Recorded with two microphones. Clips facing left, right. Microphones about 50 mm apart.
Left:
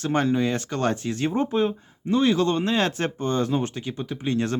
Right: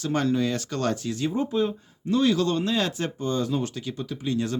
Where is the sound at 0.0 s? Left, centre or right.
Left.